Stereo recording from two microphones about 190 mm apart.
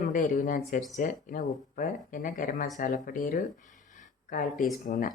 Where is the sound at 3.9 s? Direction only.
45° left (ahead or behind).